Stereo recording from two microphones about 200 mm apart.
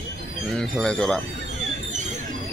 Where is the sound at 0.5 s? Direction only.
5° left (ahead or behind).